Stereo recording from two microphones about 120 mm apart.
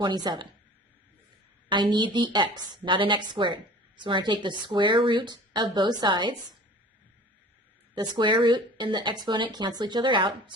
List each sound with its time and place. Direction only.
0.0 s a woman's voice: 35° right (ahead or behind)
1.7 s a woman's voice: 40° right (ahead or behind)
7.9 s a woman's voice: 35° right (ahead or behind)